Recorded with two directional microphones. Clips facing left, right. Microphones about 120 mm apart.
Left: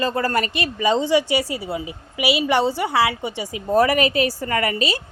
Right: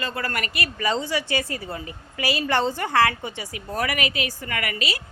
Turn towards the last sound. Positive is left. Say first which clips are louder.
# left 7 dB
turn(degrees=30)  # may be behind; listen again after turning